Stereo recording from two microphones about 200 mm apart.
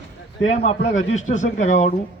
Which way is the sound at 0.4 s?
35° left (ahead or behind).